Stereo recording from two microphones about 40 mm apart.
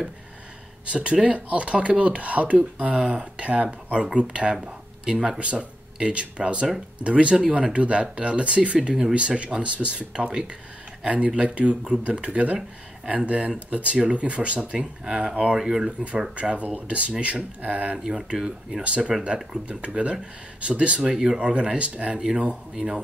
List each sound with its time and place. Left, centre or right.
0.8 s speech: right
15.5 s speech: centre
16.3 s speech: right
17.9 s speech: centre
18.8 s speech: right